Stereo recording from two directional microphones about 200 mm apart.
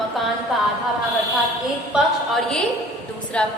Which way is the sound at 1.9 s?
Centre (ahead or behind).